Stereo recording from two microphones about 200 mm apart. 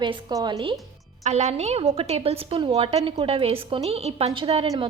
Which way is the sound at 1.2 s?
35° right (ahead or behind).